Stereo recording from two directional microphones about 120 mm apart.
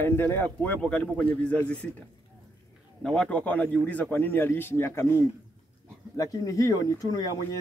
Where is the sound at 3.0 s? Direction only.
10° left (ahead or behind).